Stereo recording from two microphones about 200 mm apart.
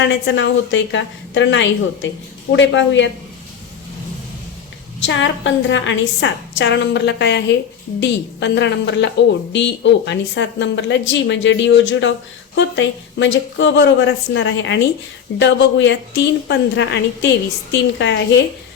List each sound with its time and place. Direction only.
0.3 s a woman's voice: 65° left (ahead or behind)
5.0 s a woman's voice: 65° left (ahead or behind)